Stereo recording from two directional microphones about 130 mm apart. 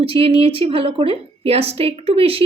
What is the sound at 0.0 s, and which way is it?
A woman's voice, 45° right (ahead or behind).